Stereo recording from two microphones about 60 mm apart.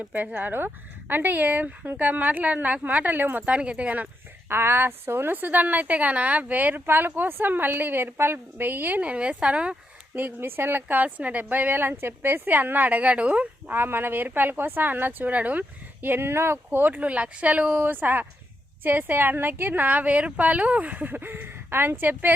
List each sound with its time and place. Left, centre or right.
0.0 s a woman's voice: right
4.4 s a woman's voice: right
9.0 s a woman's voice: centre
10.2 s speech: right
16.8 s a woman's voice: right
17.8 s speech: right